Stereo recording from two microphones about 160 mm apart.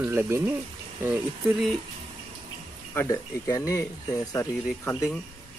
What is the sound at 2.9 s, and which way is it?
Speech, 15° left (ahead or behind).